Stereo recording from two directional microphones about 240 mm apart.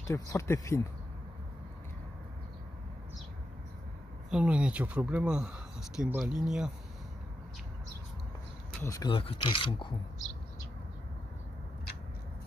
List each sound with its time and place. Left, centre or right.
0.1 s speech: centre
4.3 s speech: centre
8.8 s speech: centre